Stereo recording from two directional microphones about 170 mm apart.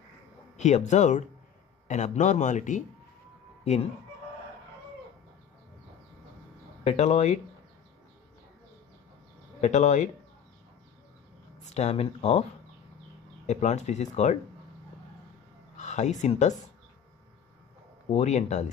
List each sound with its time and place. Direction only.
0.6 s speech: 45° left (ahead or behind)
6.8 s speech: 40° left (ahead or behind)
9.6 s speech: 45° left (ahead or behind)
11.7 s speech: 40° left (ahead or behind)
13.5 s speech: 40° left (ahead or behind)
15.8 s speech: 45° left (ahead or behind)
18.1 s speech: 40° left (ahead or behind)